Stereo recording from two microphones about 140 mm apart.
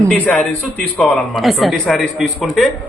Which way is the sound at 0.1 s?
5° left (ahead or behind).